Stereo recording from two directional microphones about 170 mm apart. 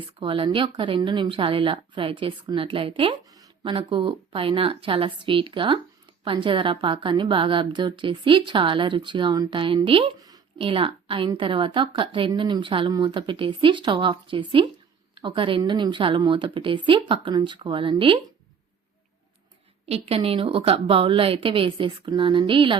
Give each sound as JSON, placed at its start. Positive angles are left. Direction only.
{"t": 0.2, "sound": "a woman's voice", "side_deg": -30}
{"t": 19.9, "sound": "speech", "side_deg": -35}